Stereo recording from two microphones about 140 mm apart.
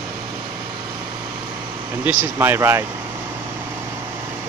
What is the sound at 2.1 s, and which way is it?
Speech, 15° right (ahead or behind).